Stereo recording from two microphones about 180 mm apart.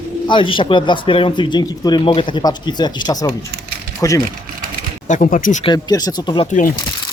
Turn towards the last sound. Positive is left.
turn(degrees=50)  # may be behind; listen again after turning